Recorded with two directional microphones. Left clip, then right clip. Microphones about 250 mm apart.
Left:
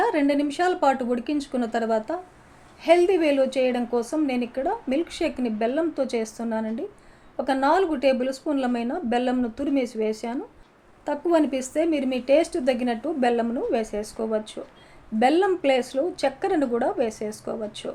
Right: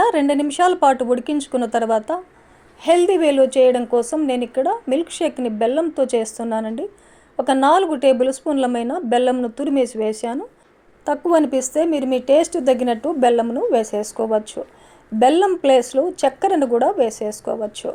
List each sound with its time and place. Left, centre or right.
0.0 s a woman's voice: right